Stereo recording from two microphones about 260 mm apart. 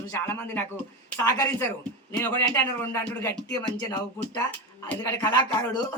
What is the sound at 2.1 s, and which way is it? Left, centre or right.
Speech, centre.